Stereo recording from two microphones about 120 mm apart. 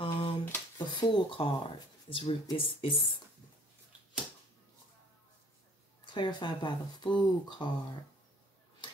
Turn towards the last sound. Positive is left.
turn(degrees=40)  # may be behind; listen again after turning